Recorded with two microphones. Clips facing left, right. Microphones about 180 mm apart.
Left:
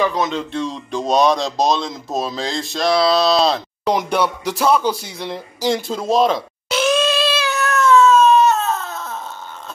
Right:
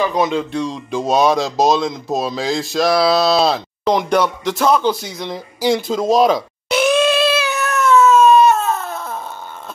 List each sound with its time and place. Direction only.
0.1 s speech: 10° right (ahead or behind)
3.8 s speech: 10° left (ahead or behind)
5.6 s speech: 5° right (ahead or behind)
6.7 s a sound: 15° right (ahead or behind)
7.1 s cat: 60° right (ahead or behind)
7.3 s cat: 15° right (ahead or behind)